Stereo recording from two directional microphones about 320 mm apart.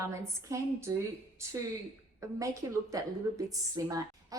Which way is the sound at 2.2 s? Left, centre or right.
Centre.